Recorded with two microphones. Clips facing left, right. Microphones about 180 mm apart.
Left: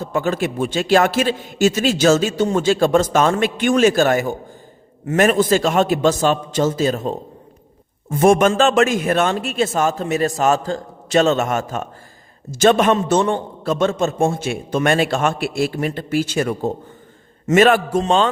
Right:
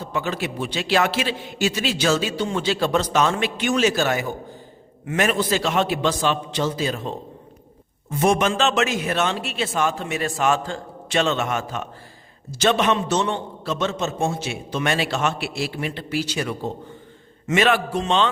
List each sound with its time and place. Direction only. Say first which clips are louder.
0.0 s a man's voice: left 6 dB; 45° left (ahead or behind)